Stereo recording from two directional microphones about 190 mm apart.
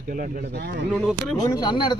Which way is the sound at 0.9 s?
Centre (ahead or behind).